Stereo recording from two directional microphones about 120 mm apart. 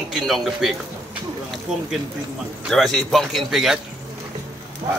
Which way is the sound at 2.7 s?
Centre (ahead or behind).